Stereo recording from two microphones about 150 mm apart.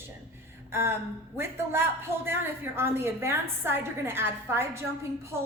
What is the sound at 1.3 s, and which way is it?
A woman's voice, 15° right (ahead or behind).